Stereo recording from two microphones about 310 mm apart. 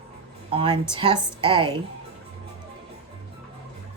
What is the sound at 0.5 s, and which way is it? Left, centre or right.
Speech, centre.